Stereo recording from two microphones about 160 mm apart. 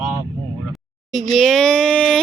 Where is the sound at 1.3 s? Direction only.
Centre (ahead or behind).